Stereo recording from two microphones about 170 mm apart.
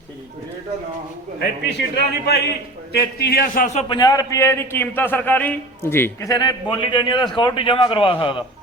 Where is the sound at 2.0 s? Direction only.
75° left (ahead or behind); by 3.8 s 50° left (ahead or behind).